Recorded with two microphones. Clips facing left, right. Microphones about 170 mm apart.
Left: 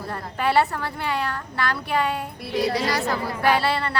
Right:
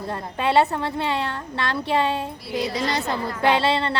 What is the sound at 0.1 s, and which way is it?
A woman's voice, 20° right (ahead or behind).